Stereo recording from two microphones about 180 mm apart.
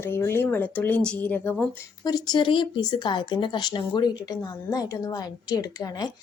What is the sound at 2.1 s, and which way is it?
A woman's voice, 20° left (ahead or behind).